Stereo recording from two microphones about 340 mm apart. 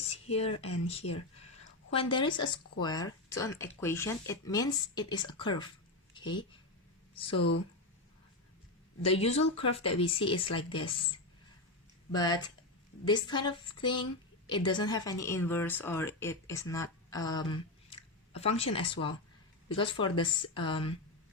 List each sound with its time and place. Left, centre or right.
0.0 s a sound: centre
0.5 s speech: left
1.9 s speech: centre
9.0 s speech: centre
12.1 s a woman's voice: centre